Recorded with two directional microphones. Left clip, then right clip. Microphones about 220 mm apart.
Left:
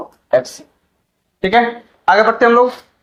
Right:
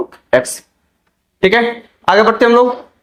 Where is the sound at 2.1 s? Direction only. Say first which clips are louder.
Right 1 dB; 45° right (ahead or behind).